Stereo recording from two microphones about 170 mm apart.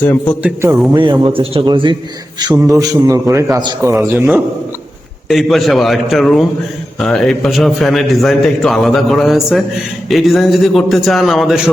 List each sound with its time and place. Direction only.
0.0 s a man's voice: 10° left (ahead or behind)
0.4 s a man's voice: 15° right (ahead or behind)
0.9 s a man's voice: 30° right (ahead or behind)
4.0 s a man's voice: 10° right (ahead or behind)
5.3 s a man's voice: centre (ahead or behind)